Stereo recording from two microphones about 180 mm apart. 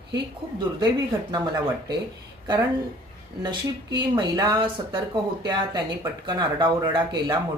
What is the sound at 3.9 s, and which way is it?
Speech, 25° right (ahead or behind).